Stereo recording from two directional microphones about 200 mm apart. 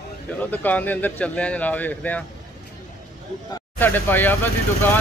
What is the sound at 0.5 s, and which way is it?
Speech, 10° left (ahead or behind).